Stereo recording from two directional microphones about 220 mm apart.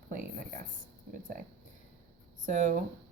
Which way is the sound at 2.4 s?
35° right (ahead or behind).